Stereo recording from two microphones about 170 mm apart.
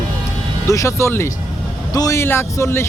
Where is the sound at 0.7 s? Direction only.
20° left (ahead or behind).